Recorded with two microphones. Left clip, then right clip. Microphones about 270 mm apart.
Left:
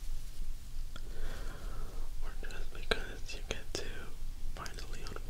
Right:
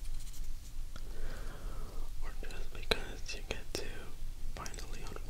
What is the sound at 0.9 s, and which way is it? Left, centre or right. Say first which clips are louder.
Whispering: left 1 dB; centre.